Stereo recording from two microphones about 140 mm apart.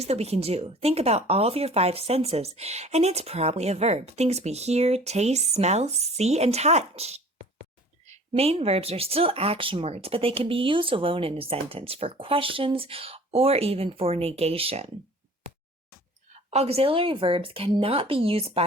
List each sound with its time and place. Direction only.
0.0 s speech: 50° right (ahead or behind)
8.3 s speech: 40° right (ahead or behind)
16.5 s speech: 45° right (ahead or behind)